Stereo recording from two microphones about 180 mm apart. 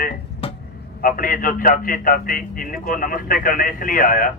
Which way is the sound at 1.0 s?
50° left (ahead or behind).